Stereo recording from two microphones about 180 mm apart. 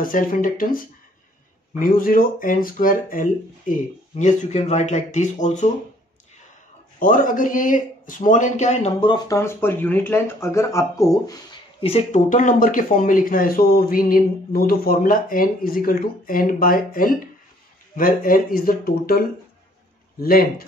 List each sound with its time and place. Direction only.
0.0 s a man's voice: 50° left (ahead or behind)
7.0 s a man's voice: 50° left (ahead or behind)
9.0 s speech: 25° left (ahead or behind)
9.4 s speech: 15° left (ahead or behind)
11.8 s speech: 35° left (ahead or behind)
12.3 s a man's voice: 45° left (ahead or behind)